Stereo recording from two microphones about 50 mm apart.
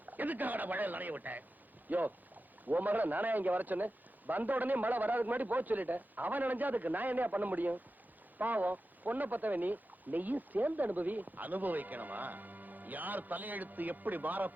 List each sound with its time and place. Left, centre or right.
0.0 s speech: right